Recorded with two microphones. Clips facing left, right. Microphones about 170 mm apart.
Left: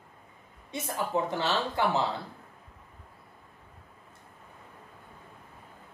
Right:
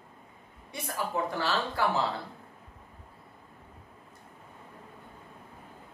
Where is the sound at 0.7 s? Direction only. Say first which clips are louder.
Left 2 dB; 20° left (ahead or behind).